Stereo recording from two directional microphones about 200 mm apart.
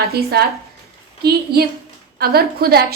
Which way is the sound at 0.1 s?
50° right (ahead or behind).